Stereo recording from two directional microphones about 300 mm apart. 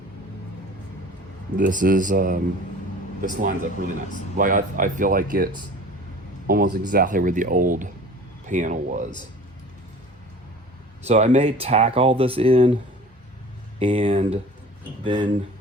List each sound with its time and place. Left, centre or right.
1.5 s speech: right
6.5 s speech: right
11.0 s speech: right